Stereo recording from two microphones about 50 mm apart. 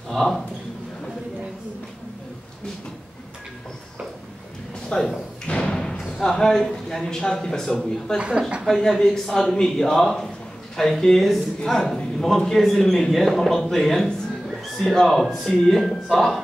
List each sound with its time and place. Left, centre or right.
0.1 s a man's voice: centre
4.9 s speech: left
8.2 s a woman's voice: right
8.6 s a man's voice: centre